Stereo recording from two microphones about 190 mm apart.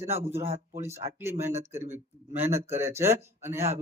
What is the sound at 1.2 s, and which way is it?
A man's voice, 10° right (ahead or behind).